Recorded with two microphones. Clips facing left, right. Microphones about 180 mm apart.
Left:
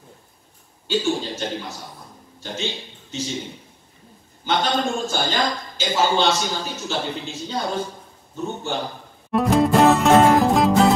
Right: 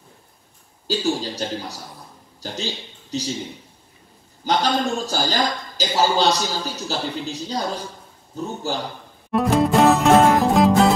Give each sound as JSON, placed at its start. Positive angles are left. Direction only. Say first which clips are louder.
{"t": 0.8, "sound": "a man's voice", "louder": "even", "side_deg": -35}
{"t": 4.5, "sound": "a man's voice", "louder": "right 1 dB", "side_deg": -35}
{"t": 9.3, "sound": "music", "louder": "even", "side_deg": 0}